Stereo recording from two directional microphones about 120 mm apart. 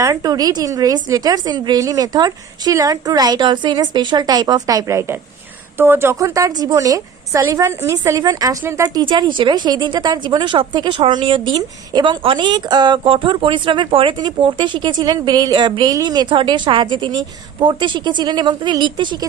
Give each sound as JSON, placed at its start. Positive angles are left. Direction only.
{"t": 0.0, "sound": "a woman's voice", "side_deg": -30}